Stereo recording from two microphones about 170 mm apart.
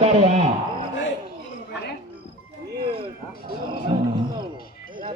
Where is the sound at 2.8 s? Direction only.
30° right (ahead or behind).